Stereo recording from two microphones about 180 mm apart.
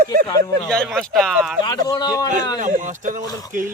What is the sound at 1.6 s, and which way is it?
Speech, 20° left (ahead or behind).